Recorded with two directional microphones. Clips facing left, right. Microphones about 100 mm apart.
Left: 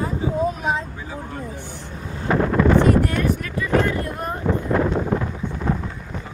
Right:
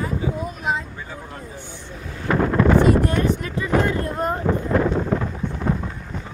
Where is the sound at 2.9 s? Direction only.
25° right (ahead or behind).